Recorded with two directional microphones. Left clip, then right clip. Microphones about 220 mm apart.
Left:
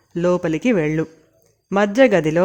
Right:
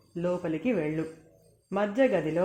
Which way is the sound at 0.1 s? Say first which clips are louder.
Left 11 dB; 50° left (ahead or behind).